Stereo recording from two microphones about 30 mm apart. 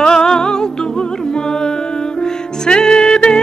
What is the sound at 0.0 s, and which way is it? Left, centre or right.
Music, left.